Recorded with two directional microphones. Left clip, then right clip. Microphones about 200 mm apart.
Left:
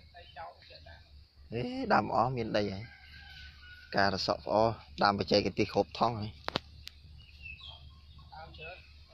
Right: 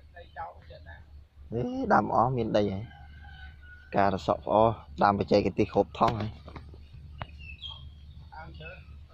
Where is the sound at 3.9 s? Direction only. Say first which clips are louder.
Right 4 dB; 5° left (ahead or behind).